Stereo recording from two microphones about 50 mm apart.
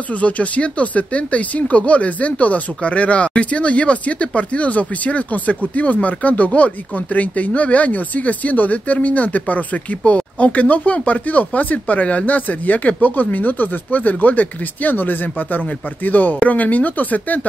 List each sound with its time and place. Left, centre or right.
0.1 s speech: left